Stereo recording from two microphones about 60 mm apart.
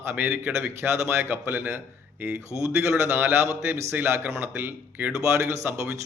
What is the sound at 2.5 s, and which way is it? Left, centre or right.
Speech, right.